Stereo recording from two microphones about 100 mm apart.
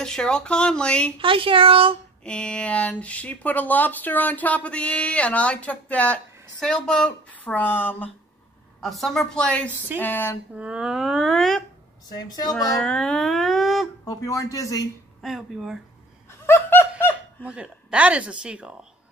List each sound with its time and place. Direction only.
0.0 s speech: 5° left (ahead or behind)
1.2 s speech: 60° right (ahead or behind)
2.2 s speech: 10° left (ahead or behind)
8.8 s speech: centre (ahead or behind)
9.9 s speech: 20° left (ahead or behind)
10.5 s speech: 10° right (ahead or behind)
12.7 s speech: 5° left (ahead or behind)
14.0 s a man's voice: 35° left (ahead or behind)
15.2 s speech: 5° right (ahead or behind)
16.3 s laughter: 25° left (ahead or behind)
17.5 s speech: 10° right (ahead or behind)